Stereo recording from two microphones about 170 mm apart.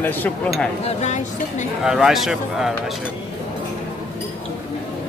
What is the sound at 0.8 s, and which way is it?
Speech, 45° left (ahead or behind).